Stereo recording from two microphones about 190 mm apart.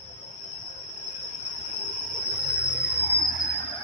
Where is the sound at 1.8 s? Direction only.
45° left (ahead or behind); by 3.2 s 60° left (ahead or behind).